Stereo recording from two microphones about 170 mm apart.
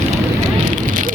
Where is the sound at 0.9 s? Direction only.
50° right (ahead or behind).